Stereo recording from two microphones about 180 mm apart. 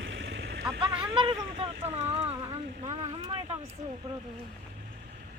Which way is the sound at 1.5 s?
35° right (ahead or behind).